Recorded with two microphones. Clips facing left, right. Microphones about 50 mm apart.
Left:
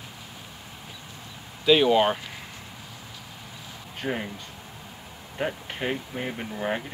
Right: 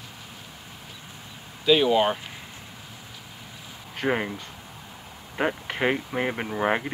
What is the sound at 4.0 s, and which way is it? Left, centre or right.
Speech, right.